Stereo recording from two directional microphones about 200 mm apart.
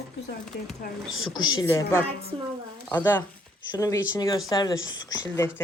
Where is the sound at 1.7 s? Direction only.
10° left (ahead or behind).